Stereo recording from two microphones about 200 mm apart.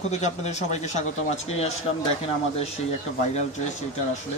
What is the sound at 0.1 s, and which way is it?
Speech, 35° left (ahead or behind).